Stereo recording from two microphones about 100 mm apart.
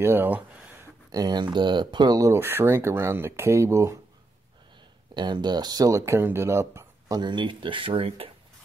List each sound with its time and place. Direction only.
0.0 s speech: 20° right (ahead or behind)
1.1 s speech: 45° right (ahead or behind)
5.1 s speech: 50° right (ahead or behind); by 7.2 s 25° right (ahead or behind)
7.2 s speech: 50° right (ahead or behind); by 8.3 s 65° right (ahead or behind)